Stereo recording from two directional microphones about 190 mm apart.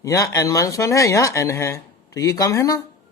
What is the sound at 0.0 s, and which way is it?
Speech, 15° left (ahead or behind).